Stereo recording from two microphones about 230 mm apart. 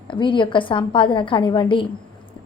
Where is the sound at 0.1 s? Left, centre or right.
Left.